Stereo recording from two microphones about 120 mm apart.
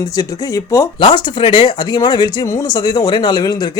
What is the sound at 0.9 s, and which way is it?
Speech, 40° left (ahead or behind).